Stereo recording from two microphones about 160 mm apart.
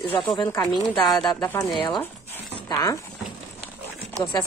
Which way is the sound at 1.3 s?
20° left (ahead or behind).